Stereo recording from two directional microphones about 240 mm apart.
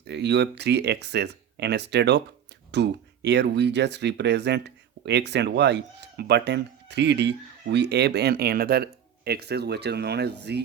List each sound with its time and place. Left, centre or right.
0.1 s speech: right